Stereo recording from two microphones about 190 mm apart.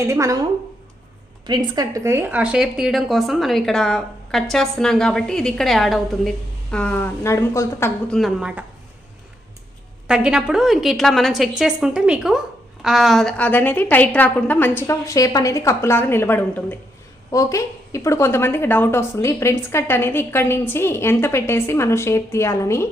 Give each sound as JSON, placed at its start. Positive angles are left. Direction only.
{"t": 0.0, "sound": "speech", "side_deg": -15}
{"t": 1.5, "sound": "a woman's voice", "side_deg": -20}
{"t": 8.2, "sound": "a woman's voice", "side_deg": -5}
{"t": 10.1, "sound": "a woman's voice", "side_deg": -5}